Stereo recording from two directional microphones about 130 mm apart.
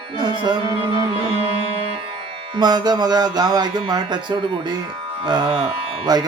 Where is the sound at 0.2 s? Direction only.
35° right (ahead or behind).